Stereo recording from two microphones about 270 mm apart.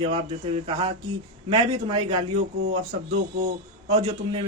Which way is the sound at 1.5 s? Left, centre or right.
Centre.